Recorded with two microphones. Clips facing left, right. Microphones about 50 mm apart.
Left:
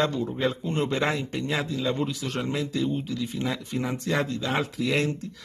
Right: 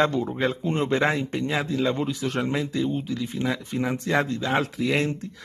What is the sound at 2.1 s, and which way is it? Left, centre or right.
Speech, centre.